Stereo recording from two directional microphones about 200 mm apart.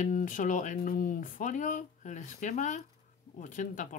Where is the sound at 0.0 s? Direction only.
40° left (ahead or behind).